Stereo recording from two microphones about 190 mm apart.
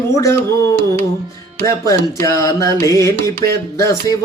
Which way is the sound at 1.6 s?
15° left (ahead or behind).